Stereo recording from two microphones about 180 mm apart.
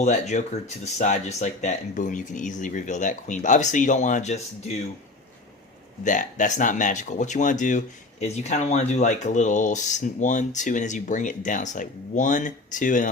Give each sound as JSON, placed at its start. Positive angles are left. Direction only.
{"t": 0.0, "sound": "speech", "side_deg": 40}
{"t": 6.1, "sound": "speech", "side_deg": 45}